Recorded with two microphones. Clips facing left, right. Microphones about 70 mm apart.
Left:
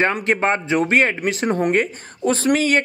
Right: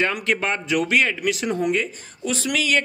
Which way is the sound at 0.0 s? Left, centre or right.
Left.